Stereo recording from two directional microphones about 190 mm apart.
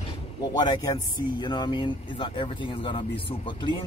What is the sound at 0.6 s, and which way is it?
Speech, 20° left (ahead or behind).